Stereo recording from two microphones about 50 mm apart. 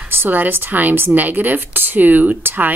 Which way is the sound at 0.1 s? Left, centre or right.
Right.